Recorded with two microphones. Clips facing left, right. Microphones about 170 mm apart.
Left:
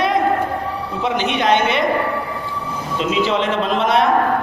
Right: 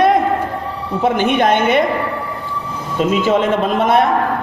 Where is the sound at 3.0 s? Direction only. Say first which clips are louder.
Right 4 dB; 50° right (ahead or behind).